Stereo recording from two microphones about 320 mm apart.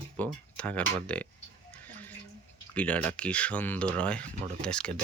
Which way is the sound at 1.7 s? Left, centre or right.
Centre.